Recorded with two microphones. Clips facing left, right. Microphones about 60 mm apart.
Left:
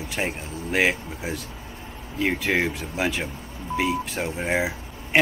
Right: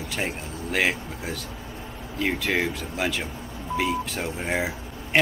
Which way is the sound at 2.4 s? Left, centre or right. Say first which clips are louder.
Left 2 dB; centre.